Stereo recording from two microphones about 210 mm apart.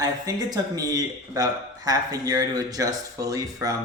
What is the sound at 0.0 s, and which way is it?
Speech, 15° right (ahead or behind).